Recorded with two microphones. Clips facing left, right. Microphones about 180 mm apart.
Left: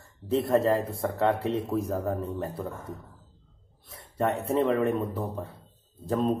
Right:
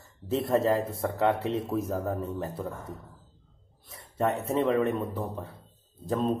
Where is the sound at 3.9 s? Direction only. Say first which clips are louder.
Even; centre (ahead or behind).